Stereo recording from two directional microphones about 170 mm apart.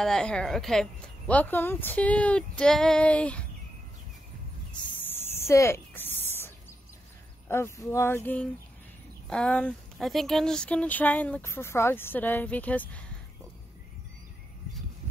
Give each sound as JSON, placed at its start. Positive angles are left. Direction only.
{"t": 0.0, "sound": "speech", "side_deg": 5}
{"t": 5.0, "sound": "a sound", "side_deg": 15}
{"t": 7.4, "sound": "speech", "side_deg": 15}
{"t": 9.3, "sound": "speech", "side_deg": 5}